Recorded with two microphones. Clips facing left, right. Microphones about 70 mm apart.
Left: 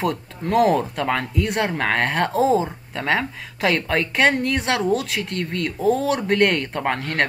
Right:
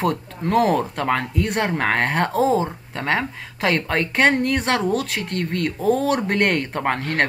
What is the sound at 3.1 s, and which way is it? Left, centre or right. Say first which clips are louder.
Speech: even; centre.